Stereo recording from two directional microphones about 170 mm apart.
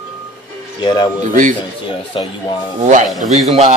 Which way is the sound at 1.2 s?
50° right (ahead or behind).